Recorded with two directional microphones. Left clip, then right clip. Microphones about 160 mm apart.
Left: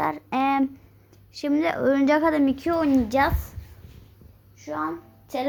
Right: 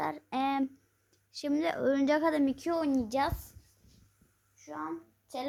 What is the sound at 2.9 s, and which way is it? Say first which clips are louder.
Speech: left 11 dB; 10° right (ahead or behind).